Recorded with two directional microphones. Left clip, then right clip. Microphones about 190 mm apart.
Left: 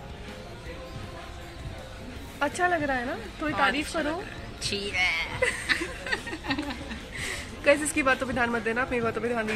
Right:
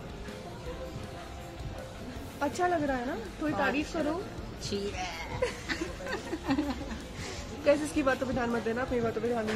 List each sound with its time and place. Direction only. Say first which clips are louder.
2.4 s speech: left 4 dB; 5° left (ahead or behind)
4.6 s a woman's voice: left 9 dB; 25° right (ahead or behind)
6.0 s a sound: left 2 dB; 50° right (ahead or behind)
7.6 s speech: left 4 dB; 10° left (ahead or behind)